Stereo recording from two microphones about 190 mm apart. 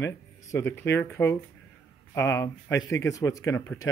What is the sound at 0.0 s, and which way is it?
Speech, 15° left (ahead or behind).